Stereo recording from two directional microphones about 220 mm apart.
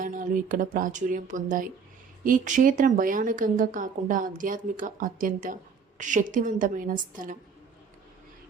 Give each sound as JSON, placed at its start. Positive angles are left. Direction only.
{"t": 0.0, "sound": "speech", "side_deg": -35}